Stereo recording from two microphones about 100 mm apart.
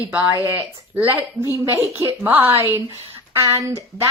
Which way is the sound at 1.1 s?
20° right (ahead or behind).